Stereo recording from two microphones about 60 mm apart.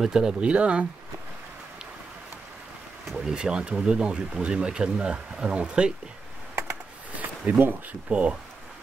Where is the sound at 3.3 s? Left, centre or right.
Centre.